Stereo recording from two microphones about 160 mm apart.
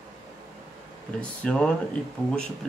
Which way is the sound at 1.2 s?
5° left (ahead or behind).